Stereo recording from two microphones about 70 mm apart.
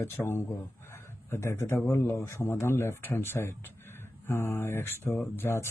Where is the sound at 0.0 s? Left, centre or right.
Left.